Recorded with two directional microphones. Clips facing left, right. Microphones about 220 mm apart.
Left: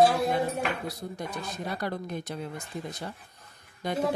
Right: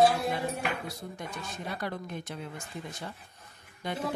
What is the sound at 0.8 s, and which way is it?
Speech, 35° left (ahead or behind).